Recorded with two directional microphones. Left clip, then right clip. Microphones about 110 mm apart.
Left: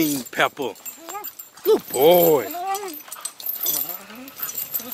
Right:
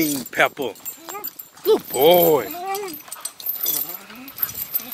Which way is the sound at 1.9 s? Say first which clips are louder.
Even; 20° left (ahead or behind).